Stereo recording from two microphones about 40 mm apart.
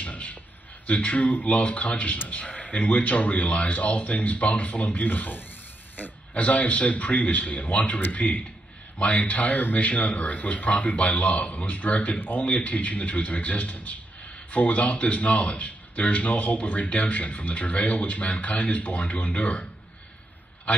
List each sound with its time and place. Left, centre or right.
0.0 s a sound: left
0.8 s speech: left
12.4 s speech: left